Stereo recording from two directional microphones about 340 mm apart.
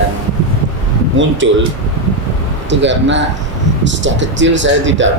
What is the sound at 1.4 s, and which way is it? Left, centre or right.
Speech, right.